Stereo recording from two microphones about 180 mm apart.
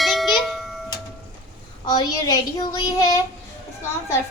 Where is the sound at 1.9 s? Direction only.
20° left (ahead or behind).